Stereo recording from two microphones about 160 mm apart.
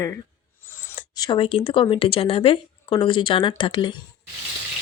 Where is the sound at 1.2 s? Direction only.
30° left (ahead or behind).